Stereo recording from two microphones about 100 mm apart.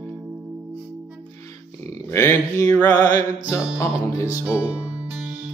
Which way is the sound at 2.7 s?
15° left (ahead or behind).